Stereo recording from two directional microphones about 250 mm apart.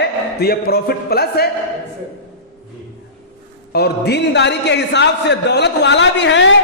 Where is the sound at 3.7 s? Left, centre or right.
Left.